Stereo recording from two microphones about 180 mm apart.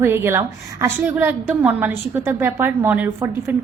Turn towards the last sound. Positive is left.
turn(degrees=-10)  # may be behind; listen again after turning